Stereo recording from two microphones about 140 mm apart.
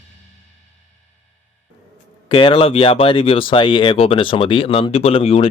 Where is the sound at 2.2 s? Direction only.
35° left (ahead or behind).